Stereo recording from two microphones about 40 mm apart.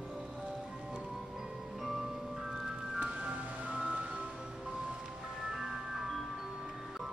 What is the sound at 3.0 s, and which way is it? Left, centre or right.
Music, right.